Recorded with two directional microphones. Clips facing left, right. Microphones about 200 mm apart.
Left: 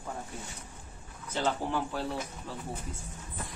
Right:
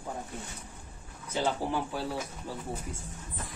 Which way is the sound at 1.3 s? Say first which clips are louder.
Right 1 dB; 10° right (ahead or behind).